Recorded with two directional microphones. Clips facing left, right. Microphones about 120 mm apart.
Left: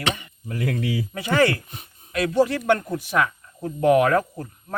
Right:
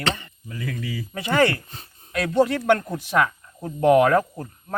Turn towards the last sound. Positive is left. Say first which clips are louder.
# right 1 dB
turn(degrees=0)  # may be behind; listen again after turning